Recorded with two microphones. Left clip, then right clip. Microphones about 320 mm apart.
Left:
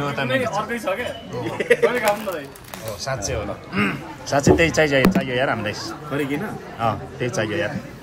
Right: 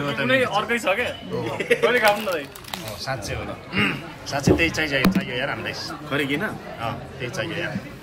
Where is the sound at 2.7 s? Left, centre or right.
Centre.